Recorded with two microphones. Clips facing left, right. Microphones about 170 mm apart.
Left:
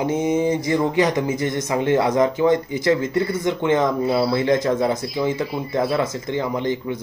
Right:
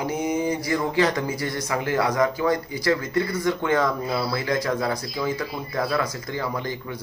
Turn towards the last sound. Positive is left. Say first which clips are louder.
# left 7 dB
turn(degrees=20)  # may be behind; listen again after turning